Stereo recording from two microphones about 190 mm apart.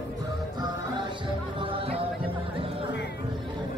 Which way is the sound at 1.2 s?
25° right (ahead or behind).